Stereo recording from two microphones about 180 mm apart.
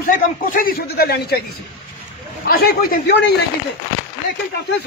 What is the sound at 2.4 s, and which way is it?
Speech, 60° left (ahead or behind).